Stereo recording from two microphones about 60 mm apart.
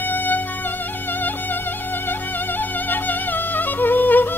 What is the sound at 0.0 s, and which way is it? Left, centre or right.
Music, left.